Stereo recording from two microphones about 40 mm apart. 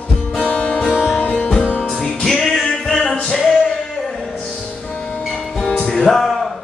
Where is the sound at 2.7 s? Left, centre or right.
Left.